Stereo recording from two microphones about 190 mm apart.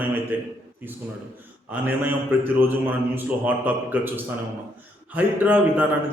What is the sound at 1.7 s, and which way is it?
Speech, 10° right (ahead or behind).